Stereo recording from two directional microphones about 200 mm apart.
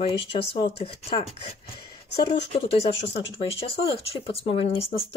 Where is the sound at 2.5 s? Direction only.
30° left (ahead or behind).